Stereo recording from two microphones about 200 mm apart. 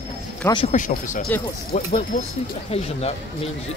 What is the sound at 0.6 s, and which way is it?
Speech, 40° left (ahead or behind).